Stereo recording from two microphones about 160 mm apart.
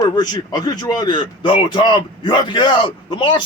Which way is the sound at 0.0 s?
25° left (ahead or behind).